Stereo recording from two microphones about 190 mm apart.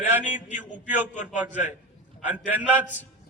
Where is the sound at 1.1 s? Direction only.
40° left (ahead or behind).